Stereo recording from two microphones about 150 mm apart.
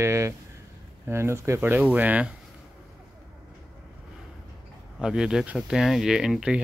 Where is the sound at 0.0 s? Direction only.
20° right (ahead or behind).